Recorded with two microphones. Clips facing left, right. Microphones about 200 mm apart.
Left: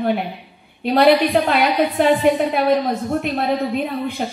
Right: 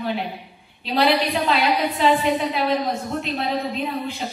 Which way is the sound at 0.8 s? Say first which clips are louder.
Left 6 dB; 55° left (ahead or behind).